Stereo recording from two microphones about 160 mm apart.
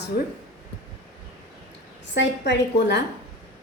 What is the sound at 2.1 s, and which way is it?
Speech, 90° left.